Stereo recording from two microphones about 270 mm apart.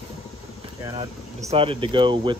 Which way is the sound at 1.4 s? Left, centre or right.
Centre.